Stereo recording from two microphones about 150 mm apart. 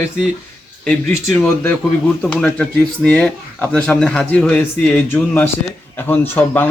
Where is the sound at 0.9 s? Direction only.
5° left (ahead or behind).